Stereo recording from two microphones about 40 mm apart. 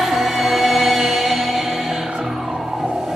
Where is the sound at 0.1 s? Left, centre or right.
Centre.